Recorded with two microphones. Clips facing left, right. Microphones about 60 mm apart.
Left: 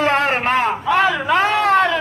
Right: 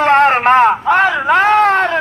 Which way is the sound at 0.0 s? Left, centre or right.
Right.